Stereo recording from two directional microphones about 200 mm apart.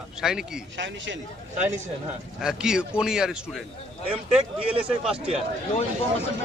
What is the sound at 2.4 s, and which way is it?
Speech, 5° right (ahead or behind).